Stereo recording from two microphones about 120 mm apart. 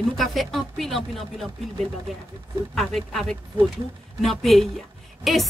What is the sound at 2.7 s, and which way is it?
A woman's voice, 5° left (ahead or behind).